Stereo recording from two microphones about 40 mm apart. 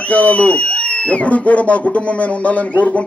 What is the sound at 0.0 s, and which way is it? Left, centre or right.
A man's voice, left.